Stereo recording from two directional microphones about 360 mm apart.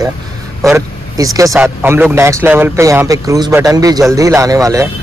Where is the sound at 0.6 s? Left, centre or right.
Centre.